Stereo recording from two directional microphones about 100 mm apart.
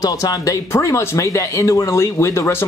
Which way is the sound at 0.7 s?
30° left (ahead or behind).